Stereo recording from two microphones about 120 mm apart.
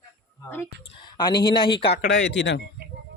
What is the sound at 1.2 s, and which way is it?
Speech, 40° left (ahead or behind).